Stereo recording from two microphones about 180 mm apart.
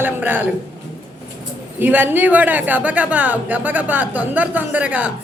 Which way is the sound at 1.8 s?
10° right (ahead or behind).